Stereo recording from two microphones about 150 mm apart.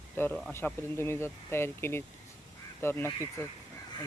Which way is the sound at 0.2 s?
15° left (ahead or behind).